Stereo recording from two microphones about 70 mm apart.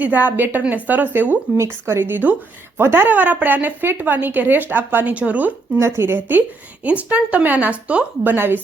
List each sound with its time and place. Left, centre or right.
0.0 s speech: right
1.5 s speech: right; by 5.5 s centre
5.8 s speech: right